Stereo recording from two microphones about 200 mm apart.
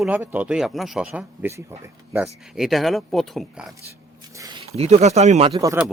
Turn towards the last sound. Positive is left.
turn(degrees=-15)  # may be behind; listen again after turning